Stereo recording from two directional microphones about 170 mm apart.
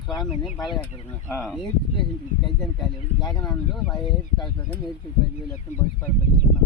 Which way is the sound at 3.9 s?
25° left (ahead or behind).